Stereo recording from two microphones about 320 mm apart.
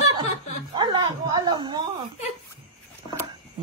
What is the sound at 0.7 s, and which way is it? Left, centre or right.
Dog, centre.